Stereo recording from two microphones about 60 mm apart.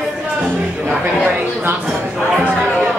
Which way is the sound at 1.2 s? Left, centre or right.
Right.